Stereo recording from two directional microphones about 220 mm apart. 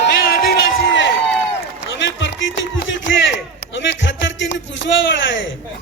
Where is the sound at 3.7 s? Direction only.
55° left (ahead or behind).